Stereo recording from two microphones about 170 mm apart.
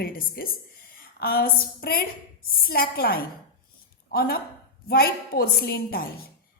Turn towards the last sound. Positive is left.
turn(degrees=60)  # may be behind; listen again after turning